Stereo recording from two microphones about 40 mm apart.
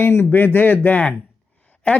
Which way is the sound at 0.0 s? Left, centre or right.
Left.